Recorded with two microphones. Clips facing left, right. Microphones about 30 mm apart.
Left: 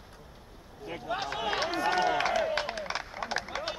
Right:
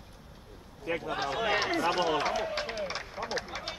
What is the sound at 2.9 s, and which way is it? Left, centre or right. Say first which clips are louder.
Run: left 1 dB; centre.